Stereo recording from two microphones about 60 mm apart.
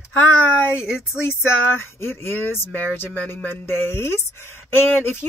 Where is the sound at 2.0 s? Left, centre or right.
Left.